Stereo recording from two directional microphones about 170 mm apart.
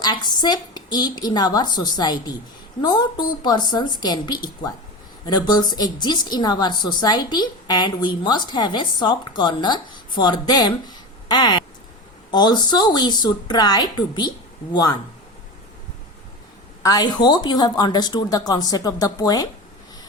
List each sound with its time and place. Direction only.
0.0 s a woman's voice: 25° left (ahead or behind)
16.8 s a woman's voice: 25° left (ahead or behind)